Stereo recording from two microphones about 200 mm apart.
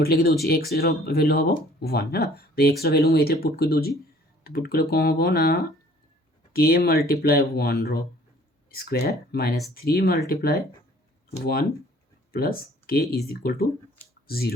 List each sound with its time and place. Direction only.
0.0 s speech: 50° left (ahead or behind)